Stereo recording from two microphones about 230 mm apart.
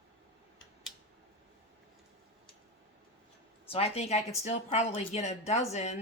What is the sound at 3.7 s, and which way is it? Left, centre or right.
A woman's voice, left.